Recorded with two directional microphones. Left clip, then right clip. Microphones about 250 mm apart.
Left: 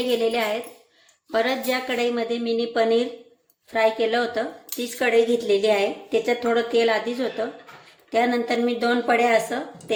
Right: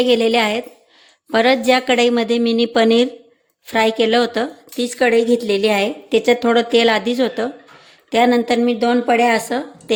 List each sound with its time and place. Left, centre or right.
0.0 s a woman's voice: right